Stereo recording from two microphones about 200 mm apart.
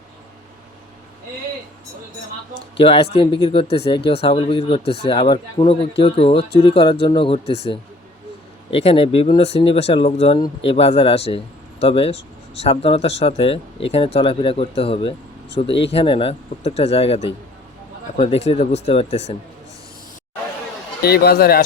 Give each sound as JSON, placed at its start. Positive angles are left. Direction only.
{"t": 2.6, "sound": "speech", "side_deg": 30}
{"t": 21.0, "sound": "speech", "side_deg": 50}